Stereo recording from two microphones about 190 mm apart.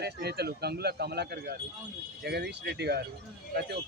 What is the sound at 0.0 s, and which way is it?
Speech, 60° right (ahead or behind).